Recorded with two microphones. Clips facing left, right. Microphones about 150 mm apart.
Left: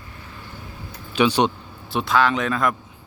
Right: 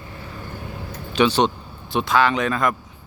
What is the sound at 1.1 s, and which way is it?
Speech, 10° left (ahead or behind).